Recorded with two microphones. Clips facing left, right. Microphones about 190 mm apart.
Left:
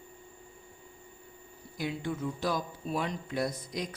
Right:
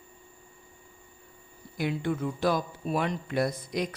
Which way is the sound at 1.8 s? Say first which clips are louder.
Right 4 dB; 65° right (ahead or behind).